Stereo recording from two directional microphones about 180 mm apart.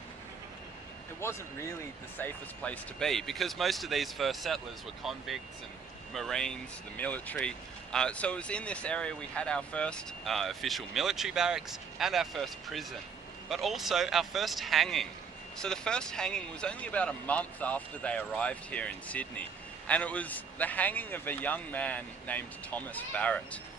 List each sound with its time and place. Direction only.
1.2 s speech: 15° left (ahead or behind)